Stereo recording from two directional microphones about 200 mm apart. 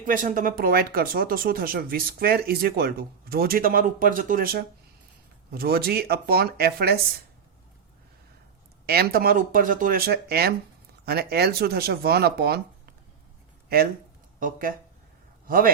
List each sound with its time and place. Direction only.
0.0 s speech: 45° right (ahead or behind)
8.9 s speech: 50° right (ahead or behind)
14.3 s a man's voice: 40° right (ahead or behind)